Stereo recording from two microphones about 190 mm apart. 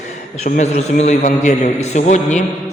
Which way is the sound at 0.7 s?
35° left (ahead or behind).